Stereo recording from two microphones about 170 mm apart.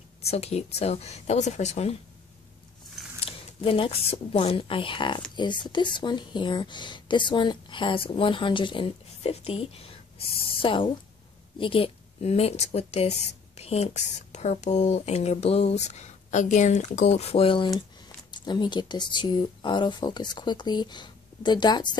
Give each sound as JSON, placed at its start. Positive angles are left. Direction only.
{"t": 0.3, "sound": "speech", "side_deg": 40}
{"t": 3.3, "sound": "a woman's voice", "side_deg": 30}